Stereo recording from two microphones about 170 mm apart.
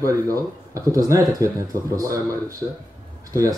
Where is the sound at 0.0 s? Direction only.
20° right (ahead or behind).